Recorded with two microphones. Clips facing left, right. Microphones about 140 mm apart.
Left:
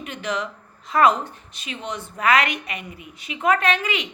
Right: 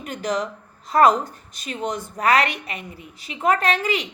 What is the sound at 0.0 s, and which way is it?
Speech, 40° right (ahead or behind).